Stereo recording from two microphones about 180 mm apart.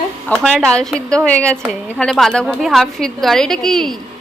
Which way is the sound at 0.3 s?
5° left (ahead or behind).